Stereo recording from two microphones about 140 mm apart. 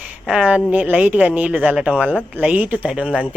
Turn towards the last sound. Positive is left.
turn(degrees=-5)  # may be behind; listen again after turning